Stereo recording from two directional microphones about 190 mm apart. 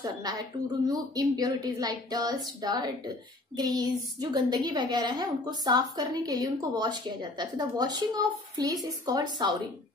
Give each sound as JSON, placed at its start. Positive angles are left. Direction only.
{"t": 0.0, "sound": "a woman's voice", "side_deg": -20}